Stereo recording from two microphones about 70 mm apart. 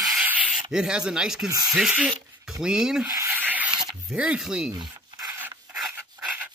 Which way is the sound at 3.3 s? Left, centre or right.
Right.